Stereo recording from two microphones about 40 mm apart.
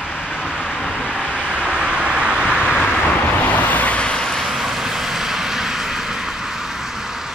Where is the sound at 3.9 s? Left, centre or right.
Left.